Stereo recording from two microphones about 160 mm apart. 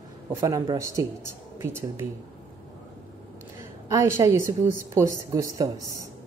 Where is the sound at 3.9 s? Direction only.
15° right (ahead or behind).